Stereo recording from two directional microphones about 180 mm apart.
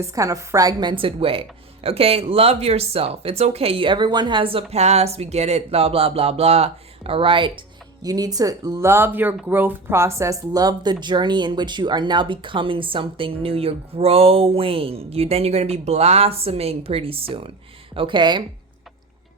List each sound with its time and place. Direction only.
0.0 s a woman's voice: 20° right (ahead or behind)